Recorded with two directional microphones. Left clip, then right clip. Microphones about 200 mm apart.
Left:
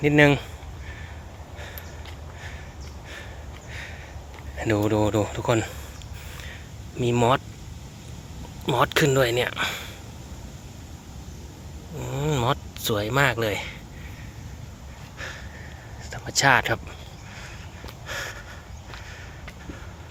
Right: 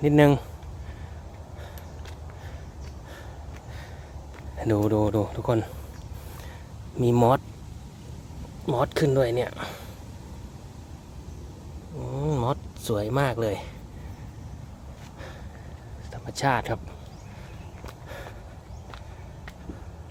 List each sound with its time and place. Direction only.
0.0 s speech: 20° right (ahead or behind)
4.5 s speech: 20° right (ahead or behind)
7.0 s speech: 25° right (ahead or behind)
8.6 s speech: 10° right (ahead or behind)
11.9 s speech: 10° right (ahead or behind)
16.0 s speech: 10° right (ahead or behind)
18.1 s a sound: 5° right (ahead or behind)